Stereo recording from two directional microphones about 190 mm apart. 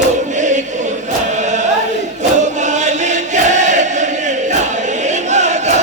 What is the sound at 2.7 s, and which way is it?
Chant, 40° right (ahead or behind).